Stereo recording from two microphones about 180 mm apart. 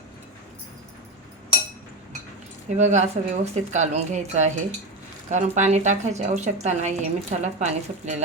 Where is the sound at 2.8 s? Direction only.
40° right (ahead or behind).